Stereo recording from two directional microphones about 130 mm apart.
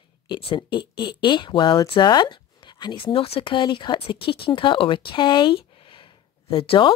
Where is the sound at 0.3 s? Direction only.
45° left (ahead or behind).